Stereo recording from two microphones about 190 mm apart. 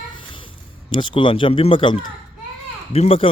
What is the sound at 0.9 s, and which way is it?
Speech, 25° left (ahead or behind).